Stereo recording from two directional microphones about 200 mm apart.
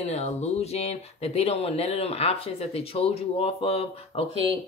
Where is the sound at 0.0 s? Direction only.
35° left (ahead or behind).